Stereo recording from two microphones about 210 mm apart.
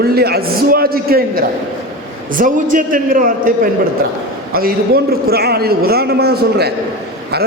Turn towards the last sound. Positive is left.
turn(degrees=-50)  # may be behind; listen again after turning